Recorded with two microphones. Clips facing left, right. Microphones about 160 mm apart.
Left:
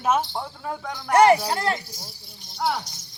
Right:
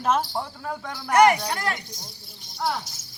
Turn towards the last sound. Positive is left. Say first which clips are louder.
# left 2 dB
turn(degrees=0)  # may be behind; listen again after turning